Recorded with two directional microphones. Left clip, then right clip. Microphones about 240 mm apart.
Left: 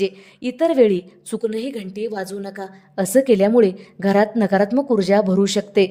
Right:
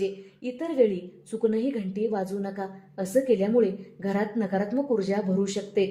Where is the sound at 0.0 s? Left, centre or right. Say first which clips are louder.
Left 7 dB; left.